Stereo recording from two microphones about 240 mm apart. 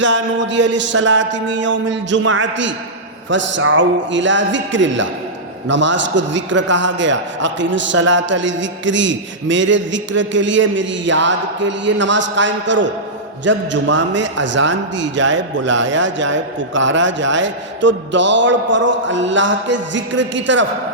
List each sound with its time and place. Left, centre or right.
0.0 s speech: right